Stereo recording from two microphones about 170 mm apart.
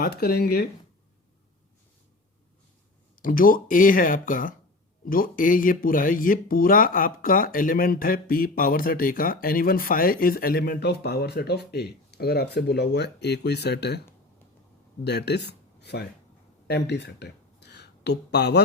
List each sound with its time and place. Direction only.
0.0 s speech: 65° left (ahead or behind)
3.2 s speech: 55° left (ahead or behind); by 14.0 s 75° left (ahead or behind)
15.0 s speech: 75° left (ahead or behind)